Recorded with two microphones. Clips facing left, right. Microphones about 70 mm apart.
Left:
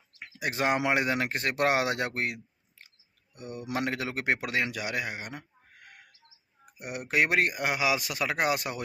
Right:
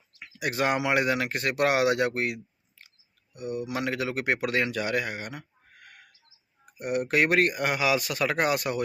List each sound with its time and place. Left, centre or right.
0.2 s bird: left
0.8 s speech: left